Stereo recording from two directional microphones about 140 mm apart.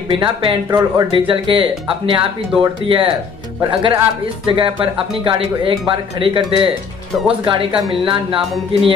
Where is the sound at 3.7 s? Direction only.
35° right (ahead or behind).